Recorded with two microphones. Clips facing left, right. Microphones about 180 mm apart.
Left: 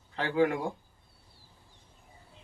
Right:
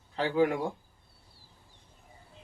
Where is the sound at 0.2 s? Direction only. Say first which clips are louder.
Right 1 dB; 5° right (ahead or behind).